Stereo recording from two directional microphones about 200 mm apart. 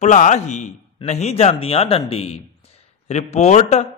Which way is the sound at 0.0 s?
35° left (ahead or behind).